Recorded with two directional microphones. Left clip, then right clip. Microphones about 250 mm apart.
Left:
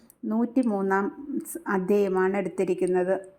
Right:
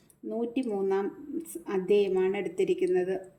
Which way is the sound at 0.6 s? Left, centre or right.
Centre.